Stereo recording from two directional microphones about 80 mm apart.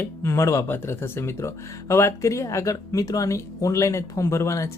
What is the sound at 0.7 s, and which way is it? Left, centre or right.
Speech, left.